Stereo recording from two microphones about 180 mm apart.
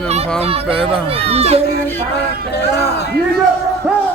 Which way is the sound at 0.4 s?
35° right (ahead or behind).